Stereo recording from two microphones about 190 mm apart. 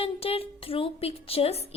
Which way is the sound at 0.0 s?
30° left (ahead or behind).